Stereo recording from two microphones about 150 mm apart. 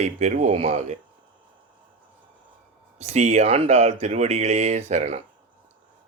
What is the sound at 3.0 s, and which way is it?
A man's voice, 50° right (ahead or behind).